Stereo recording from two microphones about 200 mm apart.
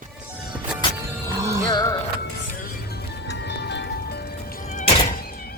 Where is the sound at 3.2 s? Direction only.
55° left (ahead or behind).